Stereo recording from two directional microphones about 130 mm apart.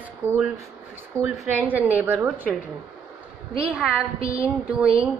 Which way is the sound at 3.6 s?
5° right (ahead or behind).